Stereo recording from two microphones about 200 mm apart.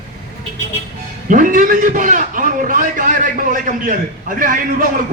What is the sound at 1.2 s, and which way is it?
A man's voice, 40° right (ahead or behind).